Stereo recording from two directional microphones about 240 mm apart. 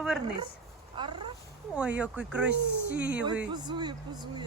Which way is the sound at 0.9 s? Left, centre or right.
Centre.